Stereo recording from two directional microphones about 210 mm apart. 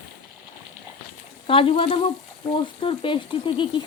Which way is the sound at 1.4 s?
25° left (ahead or behind).